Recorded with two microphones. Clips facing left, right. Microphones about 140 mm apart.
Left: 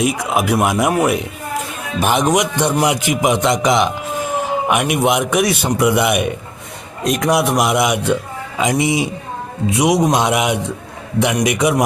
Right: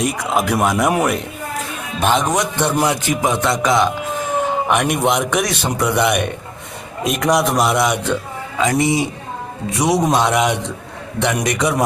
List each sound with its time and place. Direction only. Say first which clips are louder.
0.0 s a man's voice: left 1 dB; 5° left (ahead or behind)